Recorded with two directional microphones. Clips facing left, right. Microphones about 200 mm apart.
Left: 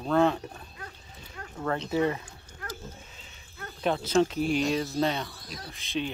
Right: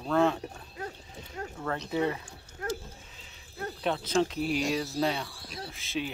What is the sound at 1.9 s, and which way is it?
Speech, 45° left (ahead or behind).